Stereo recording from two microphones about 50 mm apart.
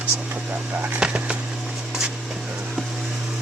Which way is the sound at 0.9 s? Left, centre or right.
Right.